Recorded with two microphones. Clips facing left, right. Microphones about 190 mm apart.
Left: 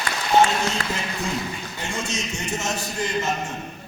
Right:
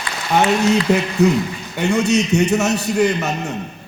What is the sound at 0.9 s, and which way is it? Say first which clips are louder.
A man's voice: right 13 dB; 65° right (ahead or behind).